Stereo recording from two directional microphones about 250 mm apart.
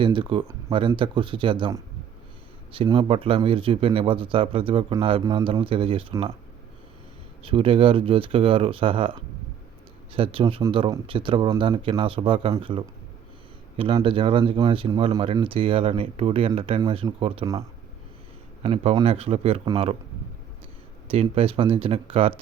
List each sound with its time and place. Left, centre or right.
0.0 s speech: centre
7.4 s speech: right
18.6 s speech: right
21.1 s speech: right